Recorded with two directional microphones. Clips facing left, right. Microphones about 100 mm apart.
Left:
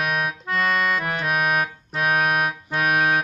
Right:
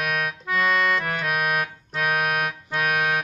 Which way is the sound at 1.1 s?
30° left (ahead or behind).